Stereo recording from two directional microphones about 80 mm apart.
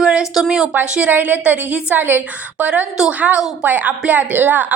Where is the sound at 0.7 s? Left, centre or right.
Centre.